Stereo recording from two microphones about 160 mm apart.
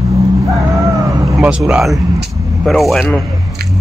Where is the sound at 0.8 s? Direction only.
20° right (ahead or behind).